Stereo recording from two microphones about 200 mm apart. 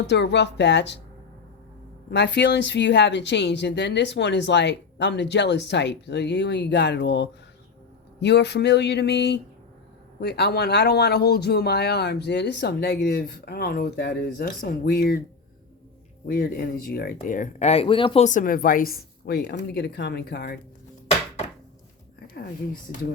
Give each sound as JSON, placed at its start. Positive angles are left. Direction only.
{"t": 0.1, "sound": "speech", "side_deg": 60}
{"t": 2.0, "sound": "speech", "side_deg": 60}
{"t": 16.2, "sound": "speech", "side_deg": 50}